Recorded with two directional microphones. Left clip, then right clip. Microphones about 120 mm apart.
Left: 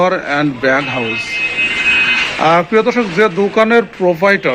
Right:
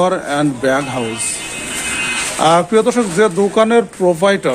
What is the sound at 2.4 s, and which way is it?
A man's voice, 20° right (ahead or behind).